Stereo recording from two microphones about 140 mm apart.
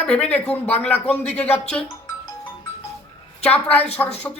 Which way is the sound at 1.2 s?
50° left (ahead or behind).